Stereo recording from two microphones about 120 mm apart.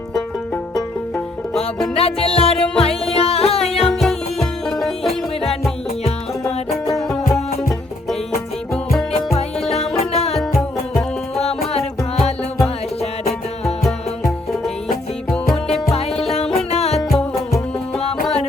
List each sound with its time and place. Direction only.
0.5 s music: 5° left (ahead or behind)
2.2 s music: 55° left (ahead or behind)
4.0 s music: centre (ahead or behind)
9.7 s music: 60° left (ahead or behind)
10.3 s music: centre (ahead or behind)
11.3 s music: 60° left (ahead or behind)
16.3 s music: 60° left (ahead or behind)